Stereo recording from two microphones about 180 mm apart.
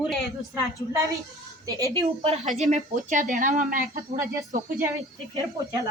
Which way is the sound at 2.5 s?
40° right (ahead or behind).